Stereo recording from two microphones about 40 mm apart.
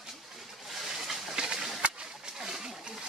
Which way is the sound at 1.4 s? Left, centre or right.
Right.